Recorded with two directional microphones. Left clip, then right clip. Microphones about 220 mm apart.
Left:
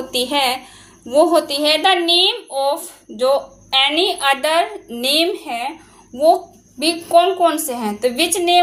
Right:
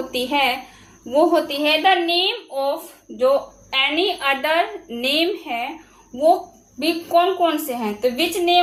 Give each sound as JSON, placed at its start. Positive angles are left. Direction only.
{"t": 0.1, "sound": "a woman's voice", "side_deg": 25}
{"t": 6.7, "sound": "a woman's voice", "side_deg": 30}